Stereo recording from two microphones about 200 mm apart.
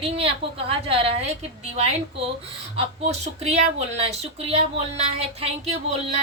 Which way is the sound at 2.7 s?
35° right (ahead or behind).